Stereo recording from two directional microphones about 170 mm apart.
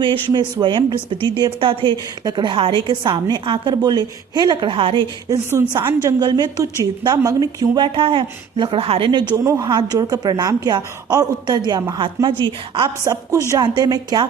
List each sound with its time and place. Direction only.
0.0 s speech: 25° right (ahead or behind)
5.5 s speech: 15° right (ahead or behind)
13.1 s speech: 20° right (ahead or behind)